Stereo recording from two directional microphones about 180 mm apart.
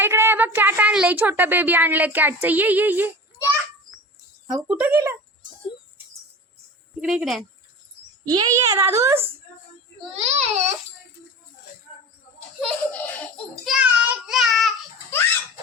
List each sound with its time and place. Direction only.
0.0 s a woman's voice: 15° right (ahead or behind)
4.4 s a woman's voice: 5° right (ahead or behind)
7.0 s speech: centre (ahead or behind)
8.3 s a woman's voice: 20° right (ahead or behind)
10.1 s a child's voice: 35° right (ahead or behind)
12.5 s a child's voice: 5° left (ahead or behind)
13.7 s child singing: 5° right (ahead or behind)